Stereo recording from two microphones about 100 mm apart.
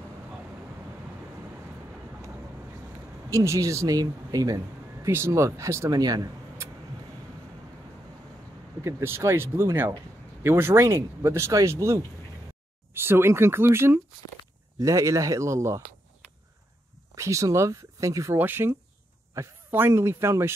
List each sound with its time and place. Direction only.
3.3 s speech: 30° right (ahead or behind)
5.0 s speech: 25° right (ahead or behind)
5.9 s speech: 40° right (ahead or behind)
8.8 s speech: 25° right (ahead or behind)
17.1 s speech: 30° right (ahead or behind)
18.4 s speech: 20° right (ahead or behind)